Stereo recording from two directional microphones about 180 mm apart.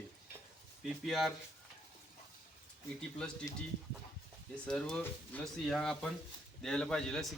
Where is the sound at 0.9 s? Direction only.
Centre (ahead or behind).